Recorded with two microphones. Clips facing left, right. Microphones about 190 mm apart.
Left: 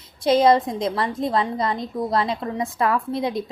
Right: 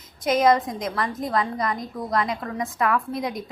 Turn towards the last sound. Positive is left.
turn(degrees=30)  # may be behind; listen again after turning